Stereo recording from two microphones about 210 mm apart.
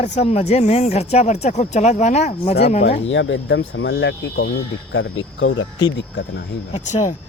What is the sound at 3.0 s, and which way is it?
Speech, 60° left (ahead or behind).